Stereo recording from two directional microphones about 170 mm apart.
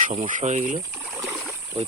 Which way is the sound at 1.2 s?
10° right (ahead or behind).